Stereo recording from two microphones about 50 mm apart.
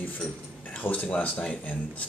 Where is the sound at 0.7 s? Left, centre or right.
Left.